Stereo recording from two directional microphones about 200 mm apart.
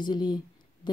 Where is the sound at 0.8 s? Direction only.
20° left (ahead or behind).